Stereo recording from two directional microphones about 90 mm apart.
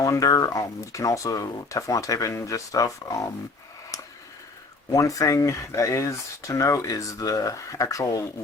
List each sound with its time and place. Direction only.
0.0 s speech: 40° left (ahead or behind)
4.9 s speech: 40° left (ahead or behind)